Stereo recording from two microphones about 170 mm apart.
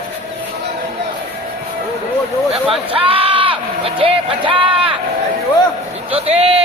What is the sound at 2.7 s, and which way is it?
Speech, 30° right (ahead or behind).